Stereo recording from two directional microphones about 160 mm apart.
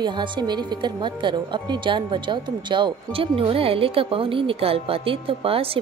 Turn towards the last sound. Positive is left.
turn(degrees=-35)  # may be behind; listen again after turning